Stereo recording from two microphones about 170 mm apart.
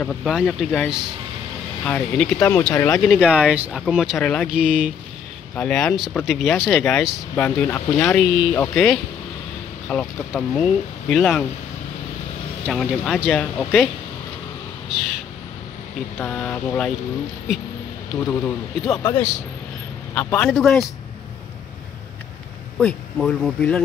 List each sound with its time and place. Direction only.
0.0 s speech: centre (ahead or behind)
2.3 s speech: 15° left (ahead or behind)
3.0 s speech: 5° right (ahead or behind)
5.6 s speech: 5° left (ahead or behind)
12.6 s speech: centre (ahead or behind)
14.9 s speech: 5° right (ahead or behind)
16.2 s speech: 10° left (ahead or behind)
18.9 s speech: 15° left (ahead or behind)
22.8 s speech: centre (ahead or behind)